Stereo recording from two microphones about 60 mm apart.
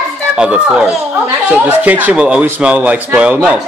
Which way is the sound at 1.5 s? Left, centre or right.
Right.